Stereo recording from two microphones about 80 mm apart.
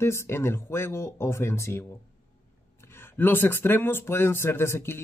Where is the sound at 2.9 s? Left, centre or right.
Left.